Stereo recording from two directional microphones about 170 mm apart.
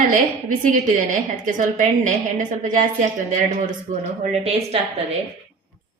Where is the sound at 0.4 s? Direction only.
50° right (ahead or behind).